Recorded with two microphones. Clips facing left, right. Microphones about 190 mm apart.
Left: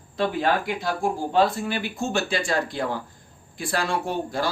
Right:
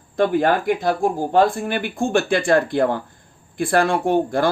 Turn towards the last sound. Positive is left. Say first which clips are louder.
# right 8 dB
turn(degrees=-55)  # may be behind; listen again after turning